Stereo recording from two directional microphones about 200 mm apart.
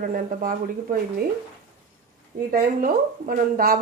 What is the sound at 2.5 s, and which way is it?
Speech, 45° right (ahead or behind).